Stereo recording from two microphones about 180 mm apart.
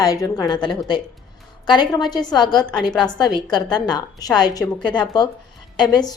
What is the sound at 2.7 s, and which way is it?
Speech, 5° left (ahead or behind).